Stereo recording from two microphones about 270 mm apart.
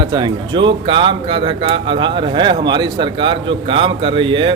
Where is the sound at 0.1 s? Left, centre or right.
Centre.